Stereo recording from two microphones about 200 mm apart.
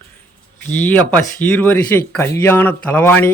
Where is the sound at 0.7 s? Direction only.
10° left (ahead or behind).